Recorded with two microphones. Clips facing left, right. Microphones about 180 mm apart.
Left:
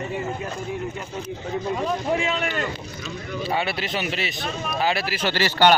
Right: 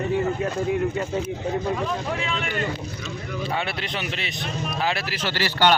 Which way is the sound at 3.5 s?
5° left (ahead or behind).